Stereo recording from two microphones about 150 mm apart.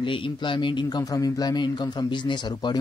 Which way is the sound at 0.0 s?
35° left (ahead or behind).